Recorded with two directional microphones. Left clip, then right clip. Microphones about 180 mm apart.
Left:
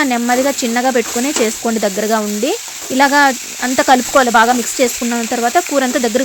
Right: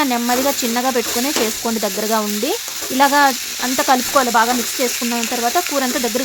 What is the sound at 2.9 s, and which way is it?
Stir, 20° left (ahead or behind).